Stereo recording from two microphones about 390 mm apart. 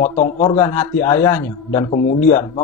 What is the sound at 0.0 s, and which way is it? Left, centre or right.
Speech, centre.